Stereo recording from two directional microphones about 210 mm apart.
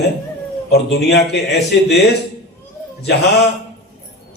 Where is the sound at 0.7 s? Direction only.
50° left (ahead or behind).